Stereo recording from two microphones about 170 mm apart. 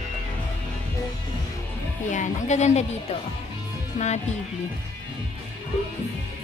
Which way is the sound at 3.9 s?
40° left (ahead or behind).